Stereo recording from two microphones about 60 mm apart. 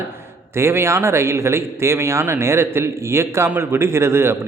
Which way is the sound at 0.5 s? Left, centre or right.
Right.